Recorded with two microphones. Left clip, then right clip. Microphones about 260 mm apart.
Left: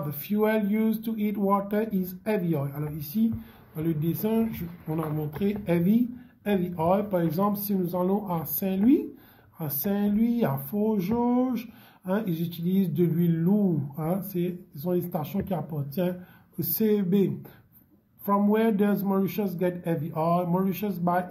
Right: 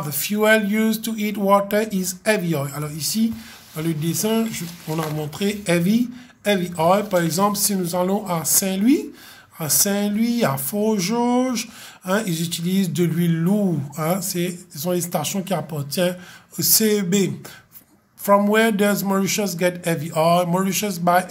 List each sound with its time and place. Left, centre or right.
0.2 s speech: right